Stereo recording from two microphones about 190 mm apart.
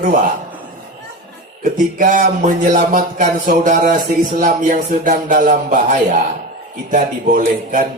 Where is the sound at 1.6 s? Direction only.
45° right (ahead or behind).